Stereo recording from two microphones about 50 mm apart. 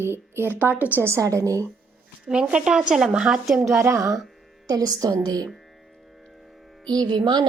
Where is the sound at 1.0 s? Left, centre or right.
Right.